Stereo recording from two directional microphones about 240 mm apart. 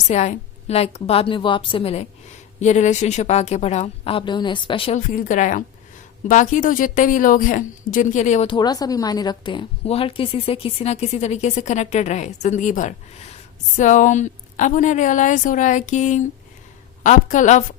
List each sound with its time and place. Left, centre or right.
0.1 s a woman's voice: left